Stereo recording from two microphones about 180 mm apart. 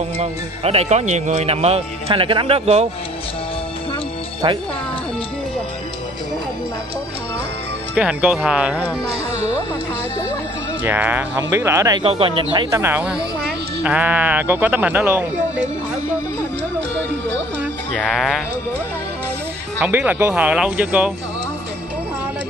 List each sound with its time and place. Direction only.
0.2 s speech: 35° right (ahead or behind)
7.9 s speech: 5° right (ahead or behind)
10.8 s speech: 10° right (ahead or behind)
12.0 s speech: 30° right (ahead or behind)
12.7 s speech: 10° right (ahead or behind)
17.9 s speech: centre (ahead or behind)
19.8 s speech: 10° right (ahead or behind)